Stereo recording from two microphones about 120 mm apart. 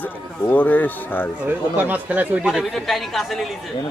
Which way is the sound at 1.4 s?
15° right (ahead or behind).